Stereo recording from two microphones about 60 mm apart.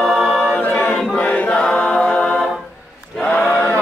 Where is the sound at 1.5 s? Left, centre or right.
Centre.